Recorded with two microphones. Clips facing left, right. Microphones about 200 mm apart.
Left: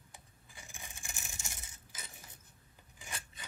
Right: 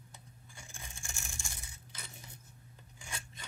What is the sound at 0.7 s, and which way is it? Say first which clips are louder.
Rattle: even; 15° left (ahead or behind).